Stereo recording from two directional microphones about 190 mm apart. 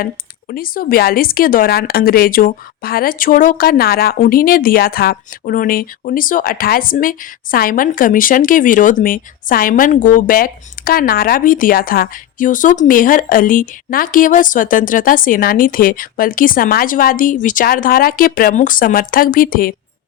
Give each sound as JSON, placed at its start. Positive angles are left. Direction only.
{"t": 0.5, "sound": "speech", "side_deg": 50}